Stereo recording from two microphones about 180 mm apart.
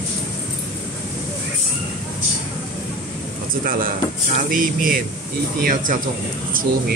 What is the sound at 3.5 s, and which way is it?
Speech, 50° right (ahead or behind).